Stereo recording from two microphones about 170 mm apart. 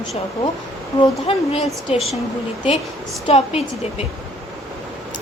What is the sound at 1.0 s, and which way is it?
Speech, 35° left (ahead or behind).